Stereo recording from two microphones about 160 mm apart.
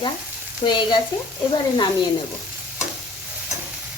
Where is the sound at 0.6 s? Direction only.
30° left (ahead or behind).